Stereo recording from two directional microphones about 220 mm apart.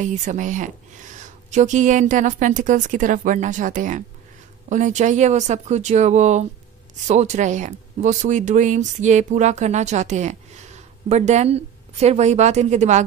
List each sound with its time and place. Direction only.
0.0 s speech: 35° right (ahead or behind)